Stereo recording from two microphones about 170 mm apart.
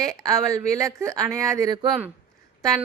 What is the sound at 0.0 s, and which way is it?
Speech, 20° right (ahead or behind).